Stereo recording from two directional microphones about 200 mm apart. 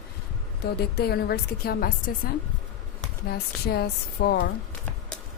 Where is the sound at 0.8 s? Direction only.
55° left (ahead or behind).